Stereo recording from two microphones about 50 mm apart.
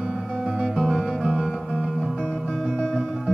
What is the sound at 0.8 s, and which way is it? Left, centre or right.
Music, centre.